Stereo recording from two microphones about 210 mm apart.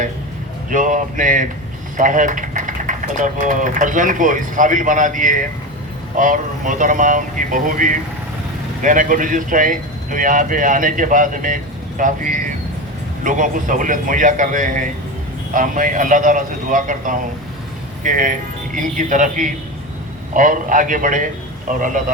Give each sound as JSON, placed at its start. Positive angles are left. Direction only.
{"t": 0.7, "sound": "speech", "side_deg": -40}